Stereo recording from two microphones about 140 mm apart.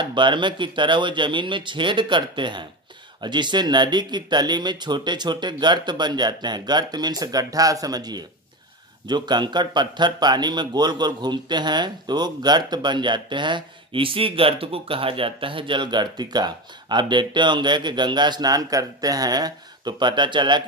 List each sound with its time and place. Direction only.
0.0 s speech: 35° right (ahead or behind)